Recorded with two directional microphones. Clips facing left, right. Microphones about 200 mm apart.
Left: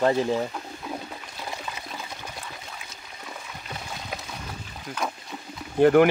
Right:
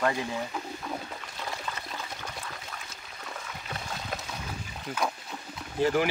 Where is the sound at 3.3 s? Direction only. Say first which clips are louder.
Even; 5° left (ahead or behind).